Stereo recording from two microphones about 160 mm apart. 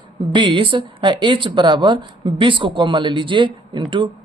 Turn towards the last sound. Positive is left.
turn(degrees=-30)  # may be behind; listen again after turning